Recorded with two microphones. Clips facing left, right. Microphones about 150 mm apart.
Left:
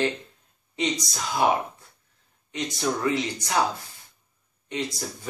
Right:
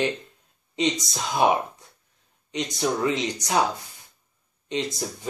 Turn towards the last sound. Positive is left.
turn(degrees=-20)  # may be behind; listen again after turning